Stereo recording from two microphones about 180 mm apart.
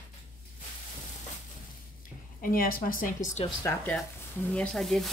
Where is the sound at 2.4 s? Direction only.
50° left (ahead or behind).